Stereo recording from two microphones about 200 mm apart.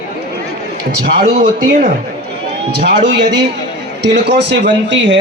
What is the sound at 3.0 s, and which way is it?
A man's voice, 60° right (ahead or behind).